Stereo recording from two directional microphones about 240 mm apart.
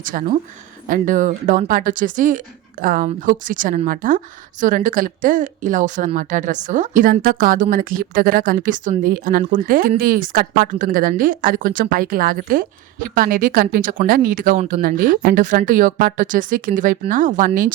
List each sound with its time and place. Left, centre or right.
0.9 s speech: right